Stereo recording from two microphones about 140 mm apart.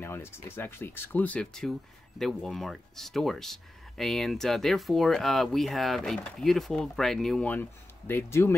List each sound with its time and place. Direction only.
0.0 s speech: 15° left (ahead or behind)